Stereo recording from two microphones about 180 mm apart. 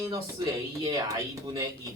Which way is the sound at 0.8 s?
20° right (ahead or behind).